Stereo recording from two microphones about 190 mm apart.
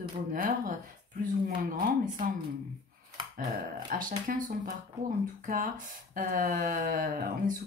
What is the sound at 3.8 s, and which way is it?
Speech, 45° right (ahead or behind).